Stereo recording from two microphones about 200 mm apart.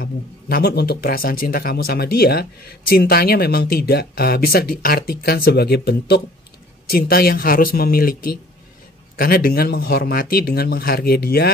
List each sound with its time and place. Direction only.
0.0 s speech: 50° left (ahead or behind)